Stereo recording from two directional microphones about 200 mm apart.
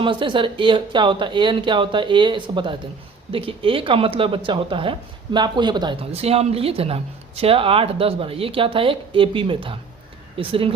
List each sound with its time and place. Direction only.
0.0 s speech: 25° right (ahead or behind)